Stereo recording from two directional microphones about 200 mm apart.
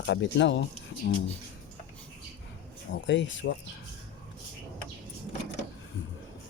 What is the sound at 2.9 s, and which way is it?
Speech, 65° left (ahead or behind).